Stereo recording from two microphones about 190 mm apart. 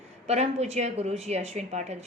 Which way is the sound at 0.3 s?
35° right (ahead or behind).